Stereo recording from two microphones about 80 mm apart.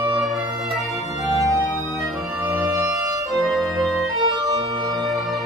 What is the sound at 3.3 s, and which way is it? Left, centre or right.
Organ, centre.